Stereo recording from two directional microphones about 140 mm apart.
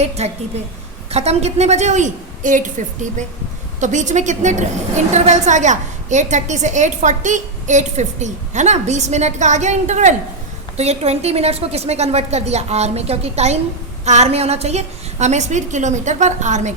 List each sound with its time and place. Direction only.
0.0 s a woman's voice: 50° right (ahead or behind)